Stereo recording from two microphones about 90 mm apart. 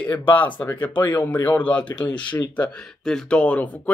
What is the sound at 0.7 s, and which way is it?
Speech, 20° left (ahead or behind).